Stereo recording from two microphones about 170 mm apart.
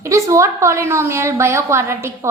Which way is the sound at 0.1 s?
20° right (ahead or behind).